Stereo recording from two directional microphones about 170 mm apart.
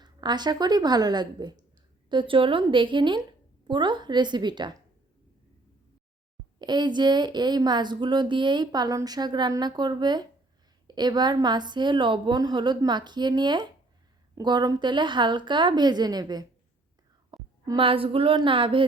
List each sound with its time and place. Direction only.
0.0 s speech: 25° right (ahead or behind)
6.6 s speech: 25° right (ahead or behind)
17.3 s whispering: 20° right (ahead or behind)
17.8 s speech: 30° right (ahead or behind)